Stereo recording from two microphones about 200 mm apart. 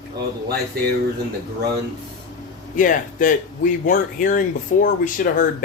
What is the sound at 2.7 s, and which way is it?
Speech, 40° left (ahead or behind).